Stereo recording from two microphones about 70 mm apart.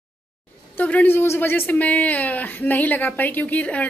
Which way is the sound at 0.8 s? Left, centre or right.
Left.